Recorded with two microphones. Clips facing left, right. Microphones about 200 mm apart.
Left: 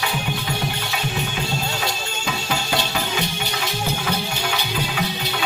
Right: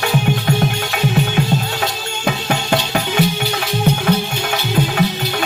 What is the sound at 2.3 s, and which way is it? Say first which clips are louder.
Music: right 7 dB; 55° right (ahead or behind).